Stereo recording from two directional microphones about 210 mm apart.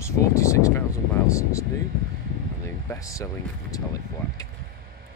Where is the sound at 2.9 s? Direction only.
15° left (ahead or behind).